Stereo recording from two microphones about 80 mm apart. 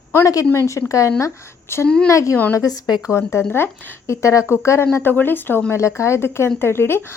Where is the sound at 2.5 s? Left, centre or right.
Left.